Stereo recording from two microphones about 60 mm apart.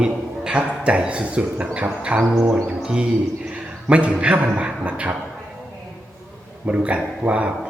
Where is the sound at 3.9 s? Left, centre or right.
Right.